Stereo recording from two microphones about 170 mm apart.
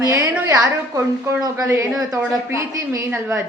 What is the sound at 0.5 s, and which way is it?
A woman's voice, 20° right (ahead or behind).